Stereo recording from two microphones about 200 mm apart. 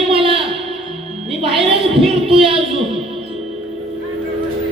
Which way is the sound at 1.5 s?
30° right (ahead or behind).